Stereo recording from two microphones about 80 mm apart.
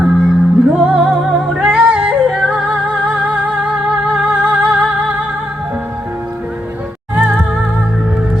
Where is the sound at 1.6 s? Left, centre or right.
Centre.